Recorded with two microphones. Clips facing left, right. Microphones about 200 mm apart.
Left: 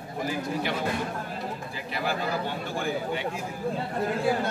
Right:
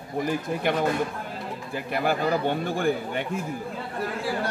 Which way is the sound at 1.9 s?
50° right (ahead or behind).